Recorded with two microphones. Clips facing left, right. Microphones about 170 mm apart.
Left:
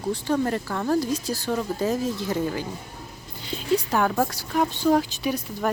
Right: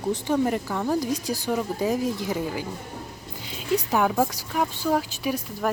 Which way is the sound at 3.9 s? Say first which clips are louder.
Right 1 dB; 10° right (ahead or behind).